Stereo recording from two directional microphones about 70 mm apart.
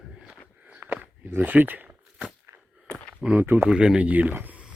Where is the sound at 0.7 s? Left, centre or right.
Right.